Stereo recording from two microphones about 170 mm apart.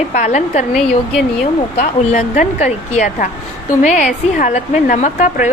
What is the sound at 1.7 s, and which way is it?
A woman's voice, 45° left (ahead or behind).